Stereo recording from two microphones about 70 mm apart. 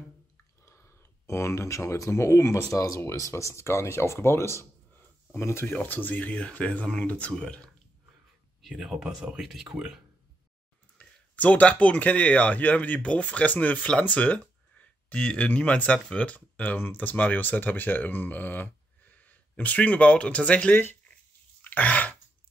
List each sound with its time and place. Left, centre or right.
0.7 s speech: left
5.7 s speech: left
8.6 s speech: centre
11.0 s speech: centre
21.6 s throat clearing: left